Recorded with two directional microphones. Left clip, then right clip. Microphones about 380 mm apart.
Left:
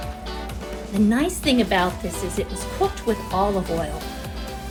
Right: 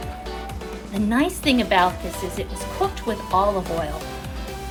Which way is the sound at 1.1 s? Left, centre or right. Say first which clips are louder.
Right 3 dB; centre.